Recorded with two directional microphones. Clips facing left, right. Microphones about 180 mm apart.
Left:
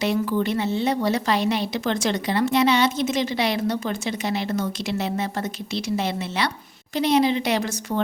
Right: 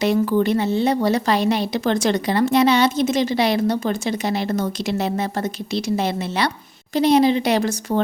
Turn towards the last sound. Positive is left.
turn(degrees=-40)  # may be behind; listen again after turning